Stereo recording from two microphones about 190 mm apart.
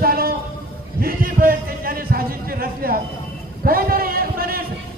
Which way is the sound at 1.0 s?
50° right (ahead or behind).